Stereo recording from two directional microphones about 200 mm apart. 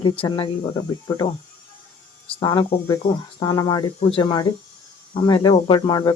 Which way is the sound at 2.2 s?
25° left (ahead or behind).